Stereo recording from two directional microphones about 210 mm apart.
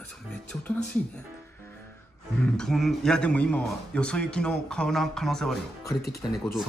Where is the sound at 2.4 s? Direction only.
5° left (ahead or behind).